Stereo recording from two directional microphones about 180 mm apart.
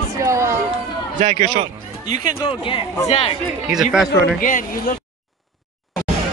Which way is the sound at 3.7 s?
5° right (ahead or behind).